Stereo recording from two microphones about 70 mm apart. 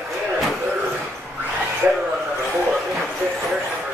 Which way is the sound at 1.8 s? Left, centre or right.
Right.